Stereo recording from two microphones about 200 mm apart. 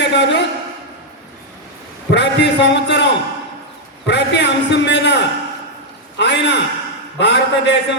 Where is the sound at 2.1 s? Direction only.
60° left (ahead or behind).